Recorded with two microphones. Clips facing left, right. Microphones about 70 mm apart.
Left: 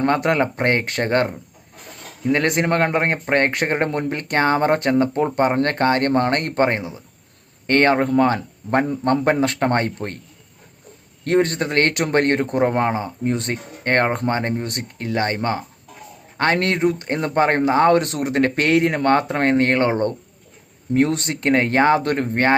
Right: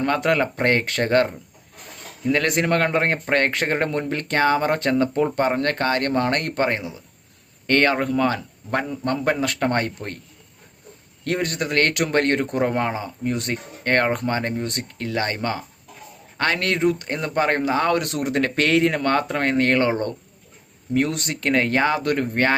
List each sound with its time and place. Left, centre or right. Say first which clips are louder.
0.0 s a man's voice: left 2 dB; left
11.2 s a man's voice: left 6 dB; left